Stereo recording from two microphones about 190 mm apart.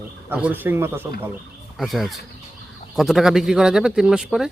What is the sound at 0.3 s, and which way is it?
Speech, 10° right (ahead or behind).